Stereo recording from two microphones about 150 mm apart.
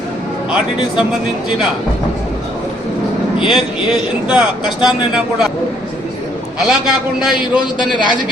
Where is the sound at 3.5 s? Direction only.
5° right (ahead or behind).